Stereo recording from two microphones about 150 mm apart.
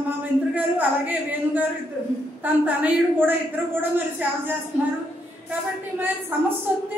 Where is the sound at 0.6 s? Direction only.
10° right (ahead or behind).